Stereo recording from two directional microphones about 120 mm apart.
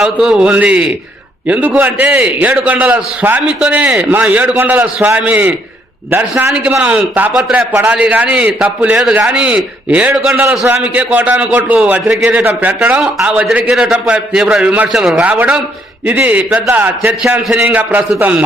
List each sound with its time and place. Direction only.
0.0 s a man's voice: 5° right (ahead or behind)
6.5 s a man's voice: 10° right (ahead or behind)
13.0 s a man's voice: 5° right (ahead or behind)